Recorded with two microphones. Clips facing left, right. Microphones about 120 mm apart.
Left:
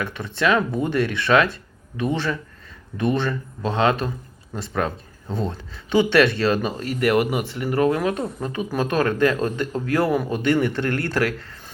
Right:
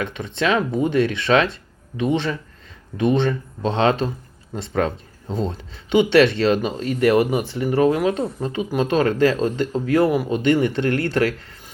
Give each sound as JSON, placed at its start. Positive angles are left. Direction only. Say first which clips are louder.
{"t": 0.0, "sound": "speech", "louder": "even", "side_deg": -20}